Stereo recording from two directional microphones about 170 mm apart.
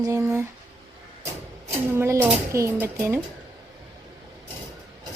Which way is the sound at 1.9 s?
15° right (ahead or behind).